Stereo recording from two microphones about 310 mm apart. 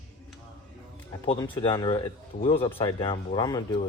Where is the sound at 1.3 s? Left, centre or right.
Centre.